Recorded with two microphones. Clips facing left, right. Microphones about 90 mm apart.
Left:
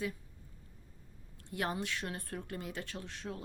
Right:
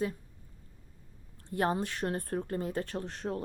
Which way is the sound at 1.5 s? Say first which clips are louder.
Right 6 dB; 35° right (ahead or behind).